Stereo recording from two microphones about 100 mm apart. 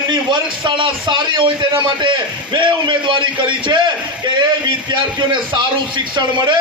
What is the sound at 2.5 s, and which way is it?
A man's voice, 55° right (ahead or behind).